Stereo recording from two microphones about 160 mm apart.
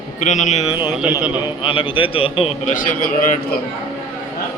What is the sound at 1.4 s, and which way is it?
A man's voice, 35° left (ahead or behind).